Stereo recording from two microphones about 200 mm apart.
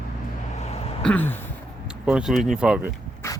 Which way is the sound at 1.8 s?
5° right (ahead or behind).